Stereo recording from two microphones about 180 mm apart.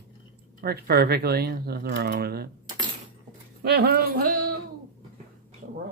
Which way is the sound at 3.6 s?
60° right (ahead or behind).